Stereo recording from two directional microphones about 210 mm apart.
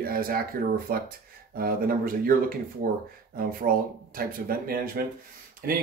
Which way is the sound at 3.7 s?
45° right (ahead or behind).